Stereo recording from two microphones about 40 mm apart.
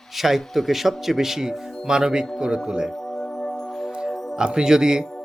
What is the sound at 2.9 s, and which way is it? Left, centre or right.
Music, centre.